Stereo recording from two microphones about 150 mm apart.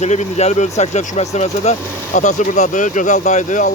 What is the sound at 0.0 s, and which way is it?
Speech, 50° left (ahead or behind).